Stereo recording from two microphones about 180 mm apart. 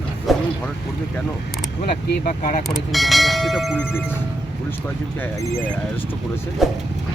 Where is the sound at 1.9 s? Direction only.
50° left (ahead or behind).